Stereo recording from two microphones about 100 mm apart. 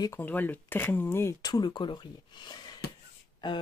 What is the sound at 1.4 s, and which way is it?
Speech, 45° left (ahead or behind).